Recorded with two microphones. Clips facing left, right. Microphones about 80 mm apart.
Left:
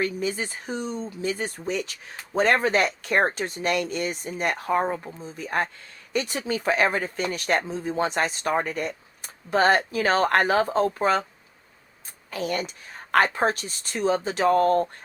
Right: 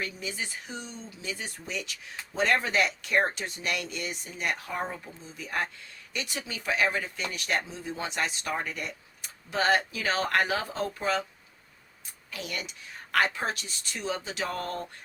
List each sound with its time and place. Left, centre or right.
0.0 s a woman's voice: left